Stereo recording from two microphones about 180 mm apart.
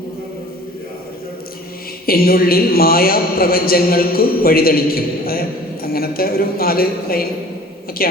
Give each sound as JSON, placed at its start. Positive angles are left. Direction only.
{"t": 2.0, "sound": "a man's voice", "side_deg": 55}